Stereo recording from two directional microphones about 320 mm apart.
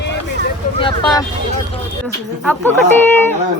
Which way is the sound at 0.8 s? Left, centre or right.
Centre.